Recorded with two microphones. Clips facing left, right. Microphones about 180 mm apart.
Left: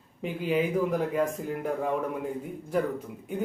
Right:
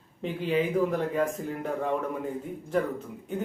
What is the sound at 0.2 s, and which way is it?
Speech, 5° left (ahead or behind).